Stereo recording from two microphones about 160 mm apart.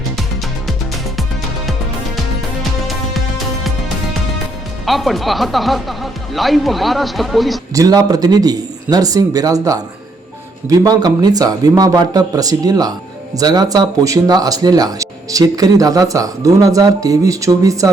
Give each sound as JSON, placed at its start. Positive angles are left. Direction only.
{"t": 2.8, "sound": "music", "side_deg": 0}
{"t": 4.9, "sound": "speech", "side_deg": 0}
{"t": 7.7, "sound": "speech", "side_deg": -20}